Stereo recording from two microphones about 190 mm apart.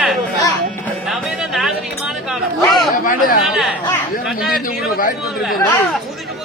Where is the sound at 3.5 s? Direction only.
Centre (ahead or behind).